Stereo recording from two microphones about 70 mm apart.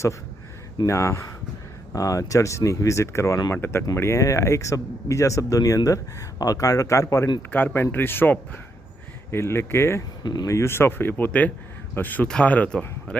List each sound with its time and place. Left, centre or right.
0.9 s speech: left
3.5 s speech: left
4.2 s speech: left
7.5 s a man's voice: left